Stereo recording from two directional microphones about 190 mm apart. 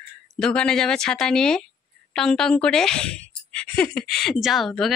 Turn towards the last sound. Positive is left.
turn(degrees=0)  # may be behind; listen again after turning